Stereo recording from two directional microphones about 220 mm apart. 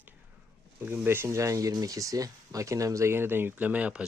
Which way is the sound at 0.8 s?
10° right (ahead or behind).